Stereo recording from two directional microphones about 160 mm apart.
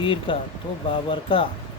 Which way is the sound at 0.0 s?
35° left (ahead or behind).